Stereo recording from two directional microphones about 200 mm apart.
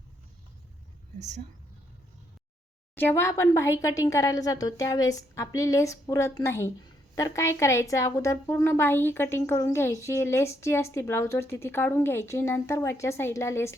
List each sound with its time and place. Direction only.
1.2 s speech: 35° right (ahead or behind)
2.9 s a woman's voice: 10° left (ahead or behind)